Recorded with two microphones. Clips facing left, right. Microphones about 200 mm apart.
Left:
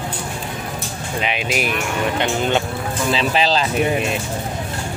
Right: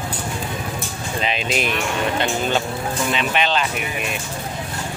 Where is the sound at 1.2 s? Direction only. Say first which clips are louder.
Left 1 dB; 10° left (ahead or behind).